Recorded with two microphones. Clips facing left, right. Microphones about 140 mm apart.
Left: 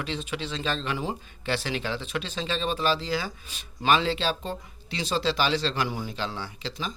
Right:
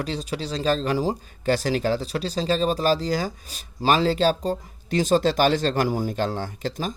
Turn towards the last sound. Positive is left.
turn(degrees=-45)  # may be behind; listen again after turning